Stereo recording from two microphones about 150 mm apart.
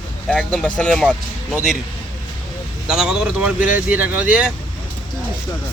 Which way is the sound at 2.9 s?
5° right (ahead or behind).